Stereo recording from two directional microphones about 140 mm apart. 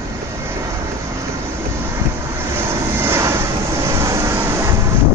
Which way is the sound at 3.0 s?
20° right (ahead or behind).